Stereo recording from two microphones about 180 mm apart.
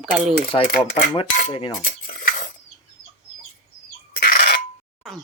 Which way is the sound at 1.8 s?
55° left (ahead or behind).